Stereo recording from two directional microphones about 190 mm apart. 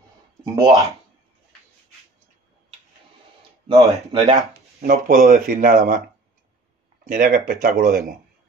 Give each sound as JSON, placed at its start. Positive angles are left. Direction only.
{"t": 0.6, "sound": "speech", "side_deg": -20}
{"t": 3.6, "sound": "speech", "side_deg": -20}
{"t": 4.8, "sound": "speech", "side_deg": -40}
{"t": 7.1, "sound": "speech", "side_deg": -45}